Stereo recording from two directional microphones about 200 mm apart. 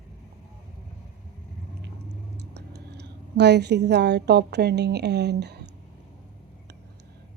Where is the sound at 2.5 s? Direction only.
55° right (ahead or behind).